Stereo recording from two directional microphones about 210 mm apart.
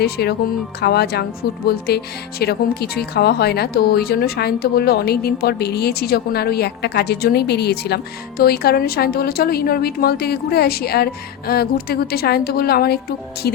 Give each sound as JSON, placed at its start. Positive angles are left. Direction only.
{"t": 0.0, "sound": "speech", "side_deg": 50}